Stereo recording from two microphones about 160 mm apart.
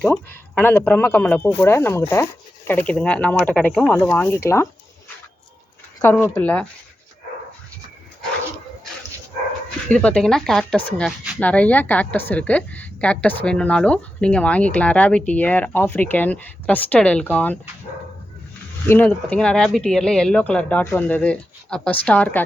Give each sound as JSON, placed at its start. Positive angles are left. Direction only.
{"t": 0.0, "sound": "a woman's voice", "side_deg": 10}
{"t": 6.3, "sound": "a woman's voice", "side_deg": 10}
{"t": 9.9, "sound": "a woman's voice", "side_deg": 5}
{"t": 18.9, "sound": "a woman's voice", "side_deg": 10}